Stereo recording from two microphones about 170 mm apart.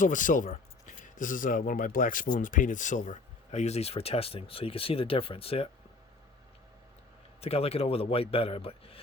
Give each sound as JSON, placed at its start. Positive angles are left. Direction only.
{"t": 0.0, "sound": "speech", "side_deg": 50}
{"t": 7.4, "sound": "a man's voice", "side_deg": 35}